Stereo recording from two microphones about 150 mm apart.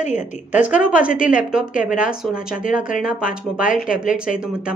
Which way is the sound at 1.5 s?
10° right (ahead or behind).